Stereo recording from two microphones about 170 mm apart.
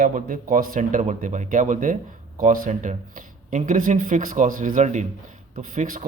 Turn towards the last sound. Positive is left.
turn(degrees=-50)  # may be behind; listen again after turning